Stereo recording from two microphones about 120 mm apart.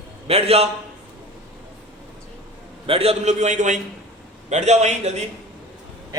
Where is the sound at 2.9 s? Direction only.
55° right (ahead or behind); by 3.7 s 85° right.